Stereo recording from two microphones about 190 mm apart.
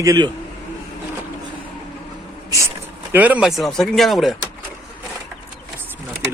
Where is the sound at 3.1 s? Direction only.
10° right (ahead or behind).